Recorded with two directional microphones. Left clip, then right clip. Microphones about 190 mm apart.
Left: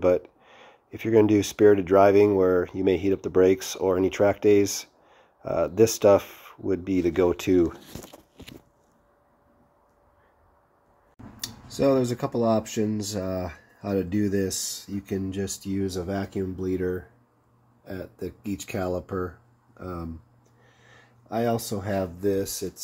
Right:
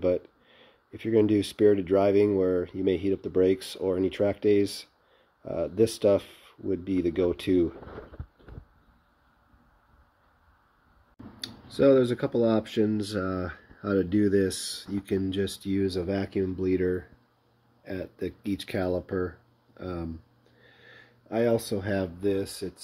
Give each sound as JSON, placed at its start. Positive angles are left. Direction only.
{"t": 0.0, "sound": "speech", "side_deg": -10}
{"t": 11.8, "sound": "speech", "side_deg": 5}
{"t": 17.8, "sound": "speech", "side_deg": -10}
{"t": 21.4, "sound": "speech", "side_deg": 0}